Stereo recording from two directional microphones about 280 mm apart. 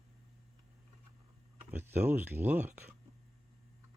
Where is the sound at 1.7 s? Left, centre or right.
Centre.